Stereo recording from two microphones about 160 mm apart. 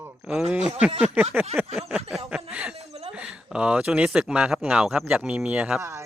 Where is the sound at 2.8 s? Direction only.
40° right (ahead or behind).